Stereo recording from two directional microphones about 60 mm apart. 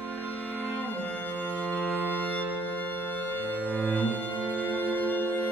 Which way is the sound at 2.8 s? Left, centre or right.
Left.